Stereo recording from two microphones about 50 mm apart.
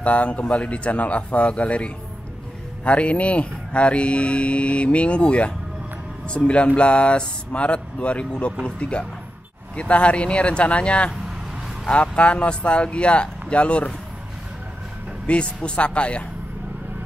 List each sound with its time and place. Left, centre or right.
0.0 s speech: left
15.2 s speech: left